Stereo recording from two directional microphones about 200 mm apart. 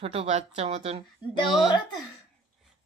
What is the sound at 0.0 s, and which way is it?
Speech, 30° right (ahead or behind).